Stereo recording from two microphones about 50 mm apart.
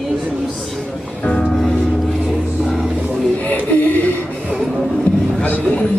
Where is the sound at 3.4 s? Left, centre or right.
Left.